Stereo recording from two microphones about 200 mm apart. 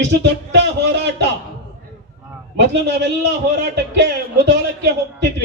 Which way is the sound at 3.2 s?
55° right (ahead or behind).